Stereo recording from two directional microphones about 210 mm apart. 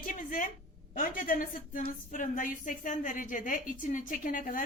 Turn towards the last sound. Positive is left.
turn(degrees=40)  # may be behind; listen again after turning